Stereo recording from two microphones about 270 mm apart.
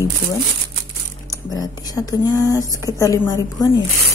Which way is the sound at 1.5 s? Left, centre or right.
Centre.